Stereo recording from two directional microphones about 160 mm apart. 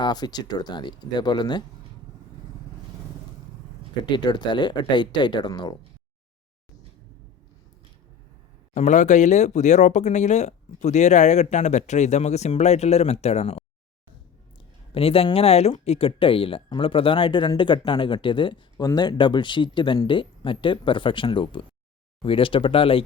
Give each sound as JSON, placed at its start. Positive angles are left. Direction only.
{"t": 0.0, "sound": "speech", "side_deg": 25}
{"t": 4.0, "sound": "speech", "side_deg": 30}
{"t": 8.7, "sound": "speech", "side_deg": 45}
{"t": 14.9, "sound": "speech", "side_deg": 35}